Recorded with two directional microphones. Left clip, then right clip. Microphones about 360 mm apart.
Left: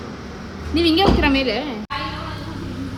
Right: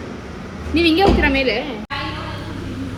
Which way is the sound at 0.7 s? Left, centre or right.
Left.